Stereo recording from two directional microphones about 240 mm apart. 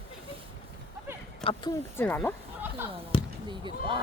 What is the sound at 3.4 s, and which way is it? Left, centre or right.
Speech, centre.